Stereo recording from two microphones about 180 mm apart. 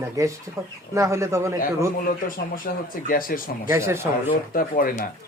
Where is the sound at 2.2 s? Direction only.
50° left (ahead or behind).